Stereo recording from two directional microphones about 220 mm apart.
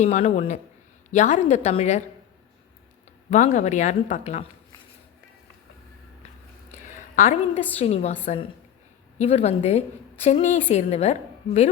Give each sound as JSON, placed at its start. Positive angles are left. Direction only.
{"t": 0.0, "sound": "speech", "side_deg": 30}
{"t": 3.2, "sound": "speech", "side_deg": 30}
{"t": 7.2, "sound": "a woman's voice", "side_deg": 30}